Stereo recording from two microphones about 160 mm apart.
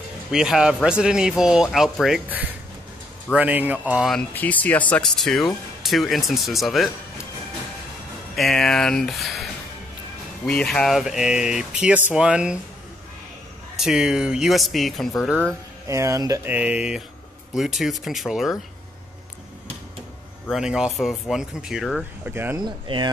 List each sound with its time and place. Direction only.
0.3 s speech: 5° right (ahead or behind)
4.1 s speech: 10° left (ahead or behind)
8.4 s speech: centre (ahead or behind)
13.7 s speech: 5° right (ahead or behind)
15.4 s speech: 20° right (ahead or behind)
16.4 s speech: 10° right (ahead or behind)
20.4 s speech: 5° right (ahead or behind)
22.3 s speech: 15° right (ahead or behind)
22.6 s speech: 30° right (ahead or behind)